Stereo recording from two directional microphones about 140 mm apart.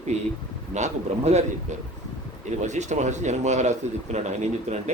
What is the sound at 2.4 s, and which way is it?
A man's voice, 55° right (ahead or behind).